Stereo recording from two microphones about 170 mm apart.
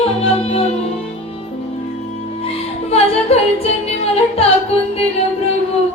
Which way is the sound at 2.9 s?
35° left (ahead or behind).